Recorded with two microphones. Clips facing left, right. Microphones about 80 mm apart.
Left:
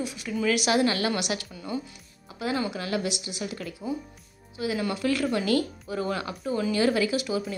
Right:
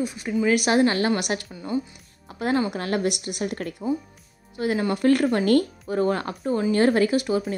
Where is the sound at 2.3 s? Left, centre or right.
Right.